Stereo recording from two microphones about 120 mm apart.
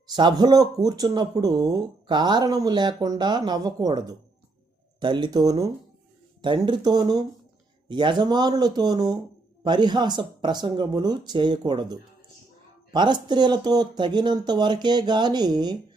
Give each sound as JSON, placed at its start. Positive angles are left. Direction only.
{"t": 0.1, "sound": "speech", "side_deg": -35}